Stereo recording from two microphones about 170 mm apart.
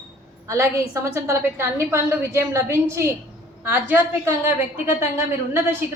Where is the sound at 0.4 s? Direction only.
15° right (ahead or behind).